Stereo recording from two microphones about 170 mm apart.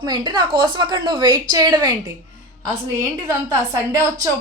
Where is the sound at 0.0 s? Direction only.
25° right (ahead or behind).